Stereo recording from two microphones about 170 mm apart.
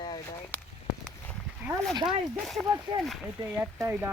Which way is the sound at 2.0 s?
Centre (ahead or behind).